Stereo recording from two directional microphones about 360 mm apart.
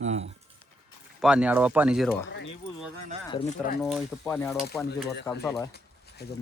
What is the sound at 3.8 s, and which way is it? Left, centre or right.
Speech, centre.